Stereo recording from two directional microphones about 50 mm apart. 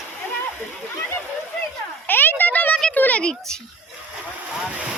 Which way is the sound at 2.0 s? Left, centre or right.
Left.